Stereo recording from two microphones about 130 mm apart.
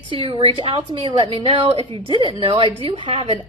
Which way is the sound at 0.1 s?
40° right (ahead or behind).